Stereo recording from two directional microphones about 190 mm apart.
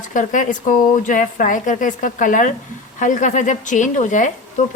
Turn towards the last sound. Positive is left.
turn(degrees=40)  # may be behind; listen again after turning